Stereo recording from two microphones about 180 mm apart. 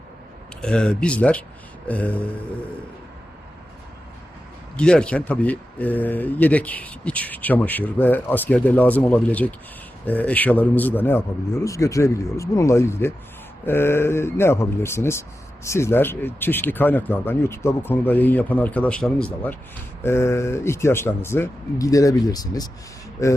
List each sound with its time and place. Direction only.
0.6 s speech: 5° left (ahead or behind)
4.8 s speech: 5° left (ahead or behind); by 22.7 s 20° left (ahead or behind)